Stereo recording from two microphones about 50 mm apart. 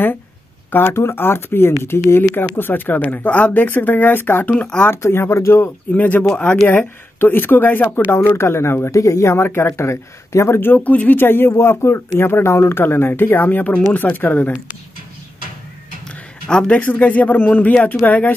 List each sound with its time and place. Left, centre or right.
0.7 s speech: left
0.9 s speech: left
2.5 s speech: left
3.0 s speech: left
3.5 s speech: left
5.4 s a man's voice: left
5.9 s speech: left
6.7 s speech: left
8.4 s speech: left
10.6 s speech: left
11.1 s speech: left
11.6 s speech: left
16.4 s speech: centre
16.8 s speech: left